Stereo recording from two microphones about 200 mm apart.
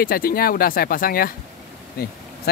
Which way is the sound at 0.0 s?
45° left (ahead or behind).